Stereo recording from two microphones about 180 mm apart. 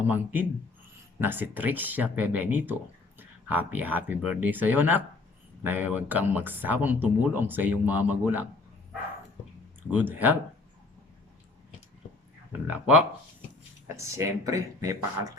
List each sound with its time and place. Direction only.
1.2 s speech: 10° right (ahead or behind)
9.9 s speech: 10° right (ahead or behind)
12.6 s speech: 10° right (ahead or behind)